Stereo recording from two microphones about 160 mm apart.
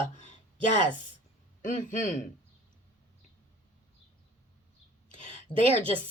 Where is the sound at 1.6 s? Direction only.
55° left (ahead or behind).